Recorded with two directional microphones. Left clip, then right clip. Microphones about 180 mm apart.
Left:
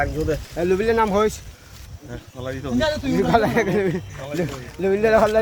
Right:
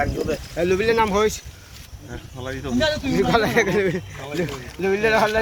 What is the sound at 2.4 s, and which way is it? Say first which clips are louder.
Speech: left 1 dB; 55° left (ahead or behind).